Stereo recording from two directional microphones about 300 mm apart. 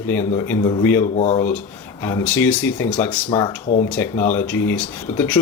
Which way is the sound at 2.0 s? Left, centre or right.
Centre.